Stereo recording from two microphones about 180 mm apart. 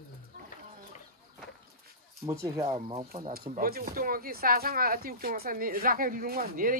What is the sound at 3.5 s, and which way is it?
Speech, 55° right (ahead or behind).